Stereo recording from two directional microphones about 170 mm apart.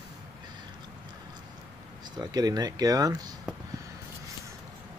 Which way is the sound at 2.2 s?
25° right (ahead or behind).